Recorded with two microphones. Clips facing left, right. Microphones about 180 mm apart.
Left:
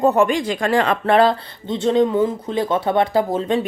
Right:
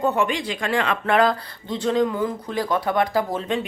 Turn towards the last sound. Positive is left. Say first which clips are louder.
# left 5 dB
turn(degrees=30)  # may be behind; listen again after turning